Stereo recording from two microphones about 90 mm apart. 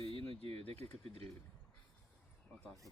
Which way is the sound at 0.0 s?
80° right.